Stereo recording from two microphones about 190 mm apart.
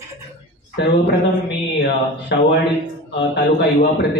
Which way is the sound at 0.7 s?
65° left (ahead or behind).